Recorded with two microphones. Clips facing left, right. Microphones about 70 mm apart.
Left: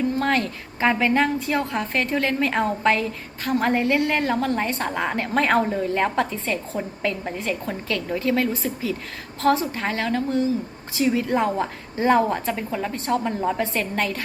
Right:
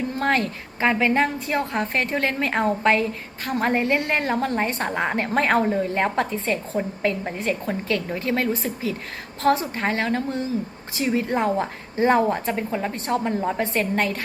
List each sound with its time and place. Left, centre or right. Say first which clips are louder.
0.2 s a woman's voice: even; centre
11.3 s a woman's voice: even; centre